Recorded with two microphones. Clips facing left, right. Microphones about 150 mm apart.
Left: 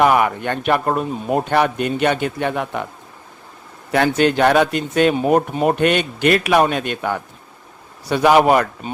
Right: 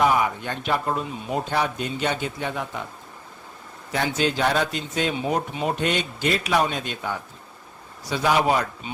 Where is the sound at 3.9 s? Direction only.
65° left (ahead or behind).